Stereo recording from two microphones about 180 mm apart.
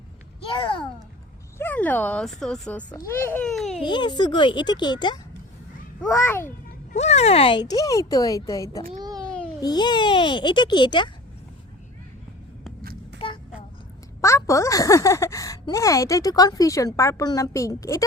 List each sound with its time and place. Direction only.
0.5 s a sound: 30° left (ahead or behind)
1.5 s speech: 10° left (ahead or behind)
2.9 s speech: 15° left (ahead or behind); by 3.8 s centre (ahead or behind)
3.8 s speech: 25° left (ahead or behind)
6.1 s speech: 10° left (ahead or behind)
6.9 s speech: 35° left (ahead or behind); by 8.8 s 20° left (ahead or behind)
9.1 s a sound: 5° left (ahead or behind)
9.6 s speech: 25° left (ahead or behind)
12.8 s a sound: 55° right (ahead or behind)
13.1 s child singing: 30° left (ahead or behind)
14.2 s speech: 15° left (ahead or behind)